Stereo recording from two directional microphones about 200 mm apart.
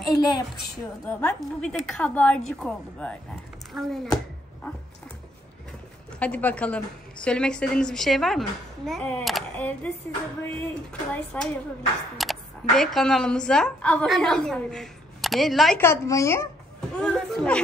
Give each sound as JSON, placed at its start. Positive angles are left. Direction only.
{"t": 0.1, "sound": "a woman's voice", "side_deg": 20}
{"t": 1.0, "sound": "a woman's voice", "side_deg": 10}
{"t": 6.1, "sound": "a woman's voice", "side_deg": 5}
{"t": 15.8, "sound": "speech", "side_deg": 15}
{"t": 17.0, "sound": "a woman's voice", "side_deg": 5}